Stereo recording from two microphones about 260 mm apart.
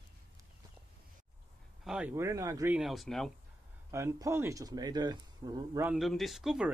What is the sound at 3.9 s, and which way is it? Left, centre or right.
Speech, centre.